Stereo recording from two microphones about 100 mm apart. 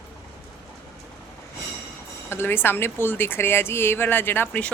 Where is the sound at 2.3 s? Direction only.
20° left (ahead or behind).